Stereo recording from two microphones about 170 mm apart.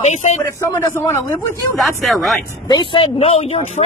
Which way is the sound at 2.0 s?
Centre (ahead or behind).